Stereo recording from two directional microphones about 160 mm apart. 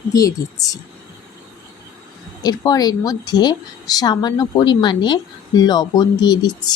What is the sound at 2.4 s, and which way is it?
A woman's voice, 25° left (ahead or behind).